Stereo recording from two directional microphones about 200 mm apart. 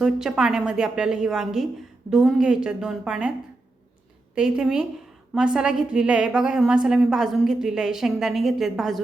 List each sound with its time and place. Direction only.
0.0 s a woman's voice: 5° right (ahead or behind)
4.4 s a woman's voice: 5° right (ahead or behind)